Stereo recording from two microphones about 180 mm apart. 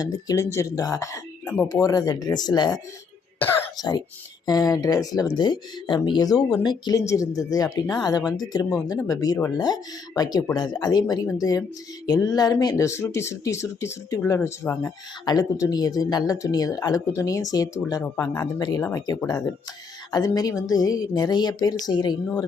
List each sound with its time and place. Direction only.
0.0 s speech: 20° left (ahead or behind)